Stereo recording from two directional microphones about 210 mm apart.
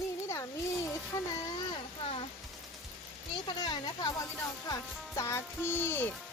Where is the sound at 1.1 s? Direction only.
15° left (ahead or behind).